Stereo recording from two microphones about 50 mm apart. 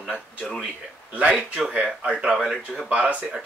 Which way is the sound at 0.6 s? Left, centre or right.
Right.